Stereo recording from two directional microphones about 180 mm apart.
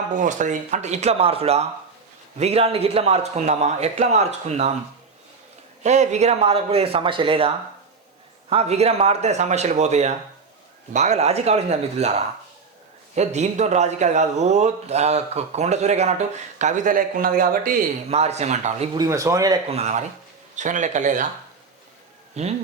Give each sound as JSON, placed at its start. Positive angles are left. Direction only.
{"t": 0.1, "sound": "speech", "side_deg": -45}
{"t": 5.8, "sound": "speech", "side_deg": -40}
{"t": 13.1, "sound": "speech", "side_deg": -40}
{"t": 18.1, "sound": "speech", "side_deg": -35}
{"t": 18.9, "sound": "speech", "side_deg": -20}
{"t": 19.6, "sound": "speech", "side_deg": -35}
{"t": 22.4, "sound": "speech", "side_deg": -40}